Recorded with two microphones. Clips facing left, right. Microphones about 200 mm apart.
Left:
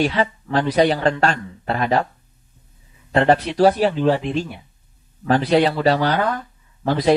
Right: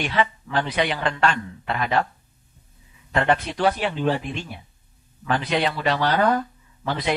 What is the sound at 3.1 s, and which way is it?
Speech, 35° left (ahead or behind).